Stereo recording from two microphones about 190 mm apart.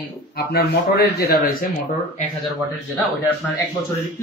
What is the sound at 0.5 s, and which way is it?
A man's voice, 55° left (ahead or behind).